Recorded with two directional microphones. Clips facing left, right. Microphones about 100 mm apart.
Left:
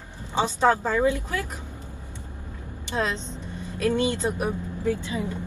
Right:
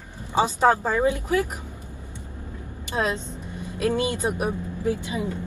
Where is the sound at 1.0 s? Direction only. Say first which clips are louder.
Right 2 dB; 20° right (ahead or behind).